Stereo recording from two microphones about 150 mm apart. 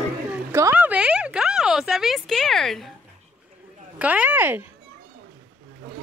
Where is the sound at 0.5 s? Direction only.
15° right (ahead or behind); by 2.9 s centre (ahead or behind).